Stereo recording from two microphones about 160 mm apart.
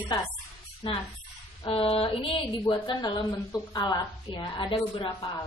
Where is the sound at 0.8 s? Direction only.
30° left (ahead or behind).